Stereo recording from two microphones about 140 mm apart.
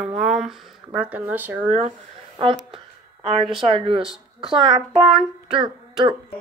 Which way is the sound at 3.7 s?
40° right (ahead or behind).